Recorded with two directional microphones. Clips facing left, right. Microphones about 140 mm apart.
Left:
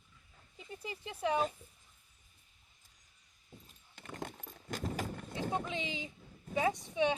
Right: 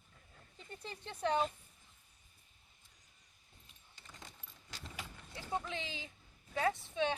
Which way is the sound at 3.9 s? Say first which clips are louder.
Left 13 dB; 55° left (ahead or behind).